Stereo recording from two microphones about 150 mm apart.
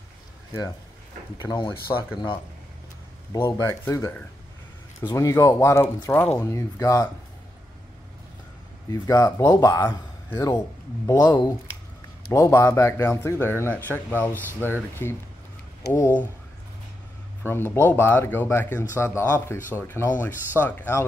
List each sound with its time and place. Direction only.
3.3 s speech: 15° left (ahead or behind)
8.9 s speech: 20° left (ahead or behind)
17.4 s speech: 15° left (ahead or behind)